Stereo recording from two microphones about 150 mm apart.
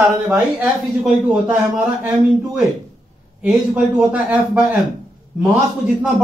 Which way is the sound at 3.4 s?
10° right (ahead or behind).